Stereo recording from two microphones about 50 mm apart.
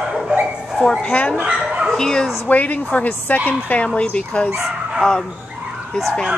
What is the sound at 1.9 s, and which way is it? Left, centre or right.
Speech, centre.